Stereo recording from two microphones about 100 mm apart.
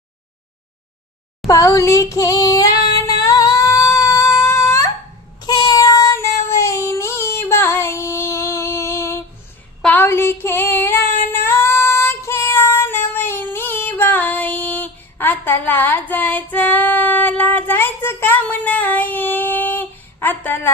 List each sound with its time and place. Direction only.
1.5 s child singing: 35° left (ahead or behind)
3.2 s singing: 40° left (ahead or behind)
5.4 s child singing: 45° left (ahead or behind); by 9.2 s 25° left (ahead or behind)
9.8 s female singing: 20° left (ahead or behind)